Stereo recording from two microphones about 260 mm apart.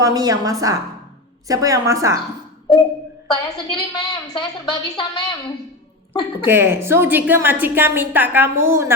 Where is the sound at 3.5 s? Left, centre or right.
Centre.